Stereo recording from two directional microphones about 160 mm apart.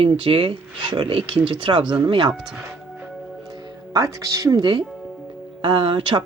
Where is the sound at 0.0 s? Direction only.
35° right (ahead or behind).